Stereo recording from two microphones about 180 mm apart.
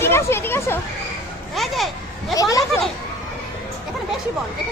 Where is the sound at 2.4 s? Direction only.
20° left (ahead or behind).